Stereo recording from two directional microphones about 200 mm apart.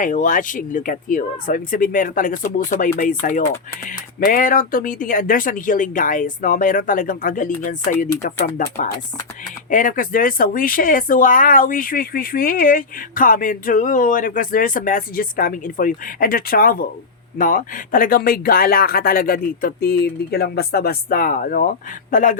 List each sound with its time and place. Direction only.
0.0 s speech: 40° left (ahead or behind)